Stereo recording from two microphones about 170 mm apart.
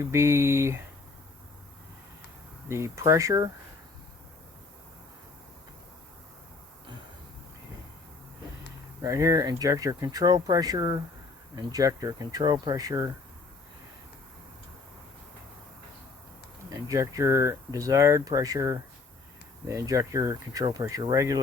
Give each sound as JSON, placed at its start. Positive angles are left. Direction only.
{"t": 0.0, "sound": "speech", "side_deg": -15}
{"t": 2.6, "sound": "speech", "side_deg": -15}
{"t": 9.0, "sound": "speech", "side_deg": -20}
{"t": 16.7, "sound": "speech", "side_deg": -20}